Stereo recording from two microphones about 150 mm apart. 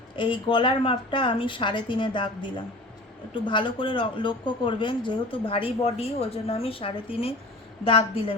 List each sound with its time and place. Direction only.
0.2 s speech: 35° left (ahead or behind)